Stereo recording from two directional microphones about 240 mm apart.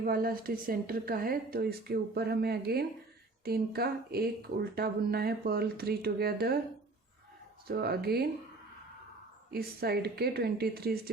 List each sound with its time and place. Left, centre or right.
0.0 s a woman's voice: right
7.7 s a woman's voice: right
9.5 s a woman's voice: right